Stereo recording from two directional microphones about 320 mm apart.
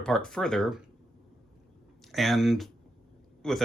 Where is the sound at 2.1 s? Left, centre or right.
Centre.